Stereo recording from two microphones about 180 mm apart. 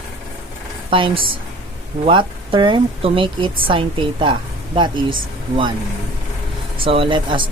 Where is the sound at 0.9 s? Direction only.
30° right (ahead or behind).